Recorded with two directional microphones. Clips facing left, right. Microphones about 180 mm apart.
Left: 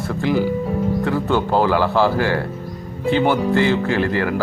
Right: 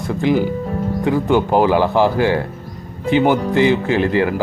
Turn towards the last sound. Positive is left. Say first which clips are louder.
# right 3 dB
turn(degrees=-20)  # may be behind; listen again after turning